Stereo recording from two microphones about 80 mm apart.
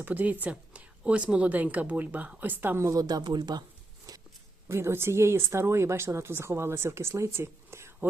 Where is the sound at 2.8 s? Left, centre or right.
Right.